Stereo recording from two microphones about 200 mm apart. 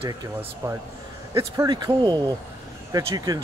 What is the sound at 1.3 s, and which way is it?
A man's voice, 20° right (ahead or behind).